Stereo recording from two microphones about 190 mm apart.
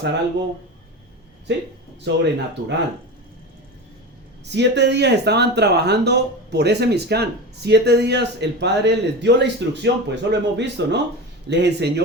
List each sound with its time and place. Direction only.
2.0 s speech: 65° right (ahead or behind)
4.4 s speech: 65° right (ahead or behind)